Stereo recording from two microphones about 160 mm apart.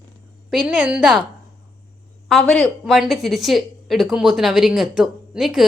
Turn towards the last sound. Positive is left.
turn(degrees=0)  # may be behind; listen again after turning